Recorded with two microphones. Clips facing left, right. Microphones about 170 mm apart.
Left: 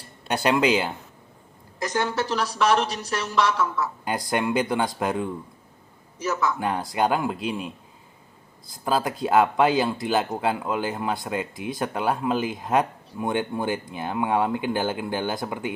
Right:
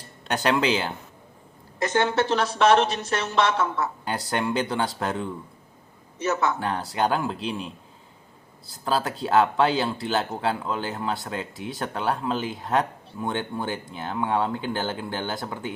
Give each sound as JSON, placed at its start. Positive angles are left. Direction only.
{"t": 0.3, "sound": "speech", "side_deg": 10}
{"t": 1.8, "sound": "a woman's voice", "side_deg": -25}
{"t": 4.0, "sound": "speech", "side_deg": 15}
{"t": 6.1, "sound": "a woman's voice", "side_deg": -25}
{"t": 6.6, "sound": "speech", "side_deg": 10}
{"t": 8.8, "sound": "speech", "side_deg": 10}